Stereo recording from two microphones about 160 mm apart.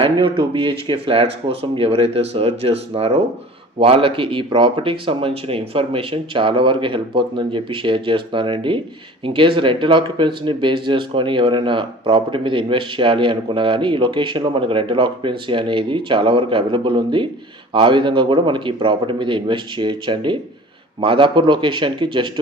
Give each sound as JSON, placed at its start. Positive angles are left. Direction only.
{"t": 0.0, "sound": "speech", "side_deg": -35}